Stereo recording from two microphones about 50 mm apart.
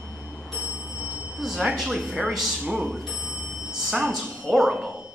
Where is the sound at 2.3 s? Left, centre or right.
Centre.